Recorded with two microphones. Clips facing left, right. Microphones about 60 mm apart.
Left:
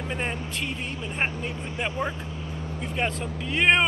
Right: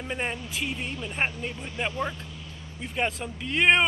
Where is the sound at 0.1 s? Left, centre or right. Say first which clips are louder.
Even; centre.